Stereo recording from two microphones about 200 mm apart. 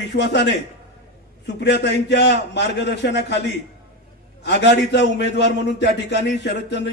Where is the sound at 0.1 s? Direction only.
60° left (ahead or behind).